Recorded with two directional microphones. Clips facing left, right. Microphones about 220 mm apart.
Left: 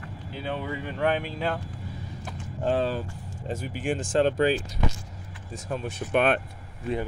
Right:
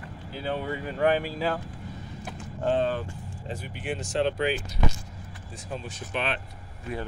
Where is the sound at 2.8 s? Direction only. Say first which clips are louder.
Even; 45° left (ahead or behind).